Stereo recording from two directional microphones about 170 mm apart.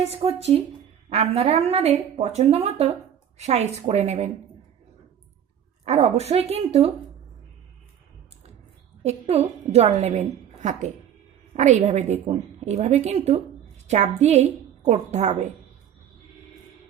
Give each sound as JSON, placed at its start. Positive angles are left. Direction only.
{"t": 0.1, "sound": "a woman's voice", "side_deg": -35}
{"t": 5.8, "sound": "a woman's voice", "side_deg": -40}
{"t": 9.0, "sound": "a woman's voice", "side_deg": -40}